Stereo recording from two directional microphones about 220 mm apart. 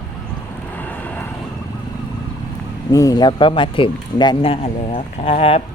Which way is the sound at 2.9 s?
15° left (ahead or behind).